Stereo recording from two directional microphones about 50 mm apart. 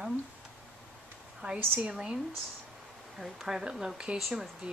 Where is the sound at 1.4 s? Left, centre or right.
Right.